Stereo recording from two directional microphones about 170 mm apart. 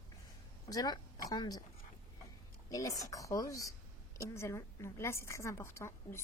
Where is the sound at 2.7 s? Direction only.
20° left (ahead or behind).